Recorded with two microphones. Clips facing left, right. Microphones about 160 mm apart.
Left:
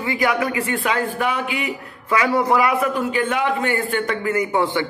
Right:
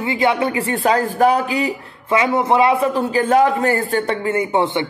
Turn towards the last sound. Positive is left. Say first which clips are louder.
# right 2 dB
turn(degrees=-20)  # may be behind; listen again after turning